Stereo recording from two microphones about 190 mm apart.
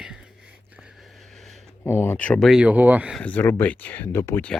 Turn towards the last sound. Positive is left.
turn(degrees=10)  # may be behind; listen again after turning